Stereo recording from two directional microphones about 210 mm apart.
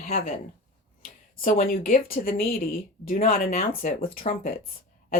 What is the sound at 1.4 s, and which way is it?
Speech, 40° left (ahead or behind).